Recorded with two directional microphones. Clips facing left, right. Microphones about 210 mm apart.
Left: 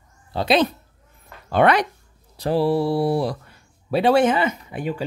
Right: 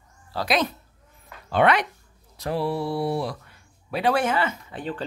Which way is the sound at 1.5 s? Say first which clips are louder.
Left 3 dB; 40° left (ahead or behind).